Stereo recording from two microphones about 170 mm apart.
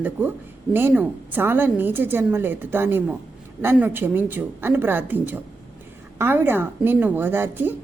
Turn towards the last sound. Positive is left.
turn(degrees=-10)  # may be behind; listen again after turning